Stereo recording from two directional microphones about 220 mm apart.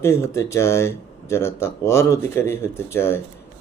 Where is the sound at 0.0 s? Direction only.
15° left (ahead or behind).